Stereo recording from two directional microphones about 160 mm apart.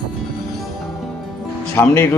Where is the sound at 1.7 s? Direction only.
15° left (ahead or behind).